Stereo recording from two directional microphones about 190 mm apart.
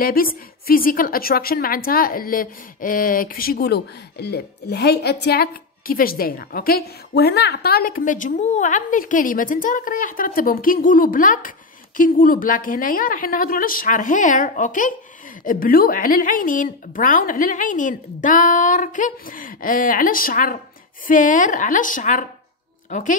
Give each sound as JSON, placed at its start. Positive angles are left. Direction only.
{"t": 0.0, "sound": "a woman's voice", "side_deg": 50}